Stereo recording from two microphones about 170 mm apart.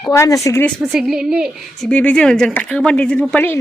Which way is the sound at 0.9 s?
5° right (ahead or behind).